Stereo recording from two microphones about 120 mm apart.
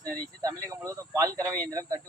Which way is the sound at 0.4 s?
25° right (ahead or behind).